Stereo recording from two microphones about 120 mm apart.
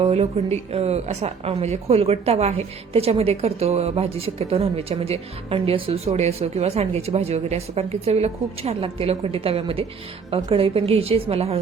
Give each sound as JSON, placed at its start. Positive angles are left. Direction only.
{"t": 0.0, "sound": "a woman's voice", "side_deg": -65}